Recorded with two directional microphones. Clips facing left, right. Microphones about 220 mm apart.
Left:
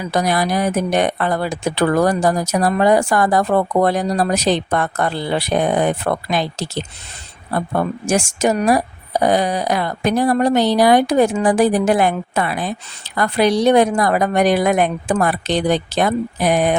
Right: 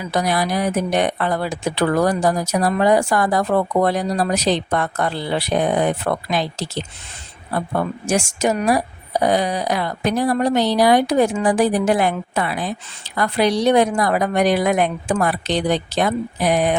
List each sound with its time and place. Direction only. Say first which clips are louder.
0.1 s speech: left 2 dB; 45° left (ahead or behind)
8.0 s speech: left 2 dB; 45° left (ahead or behind)